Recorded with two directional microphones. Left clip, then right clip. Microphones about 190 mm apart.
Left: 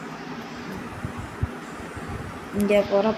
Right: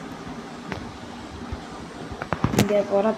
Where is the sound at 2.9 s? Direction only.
5° left (ahead or behind).